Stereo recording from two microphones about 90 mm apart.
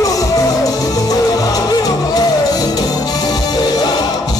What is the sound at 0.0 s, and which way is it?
Music, 40° left (ahead or behind).